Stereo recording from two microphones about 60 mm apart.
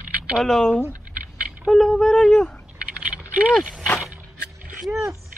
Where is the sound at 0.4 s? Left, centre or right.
Centre.